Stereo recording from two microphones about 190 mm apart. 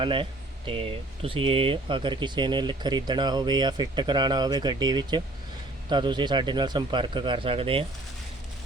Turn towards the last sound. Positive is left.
turn(degrees=-30)  # may be behind; listen again after turning